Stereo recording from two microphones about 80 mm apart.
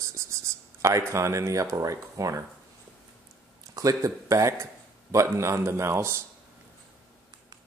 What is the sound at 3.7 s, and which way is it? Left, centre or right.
Speech, right.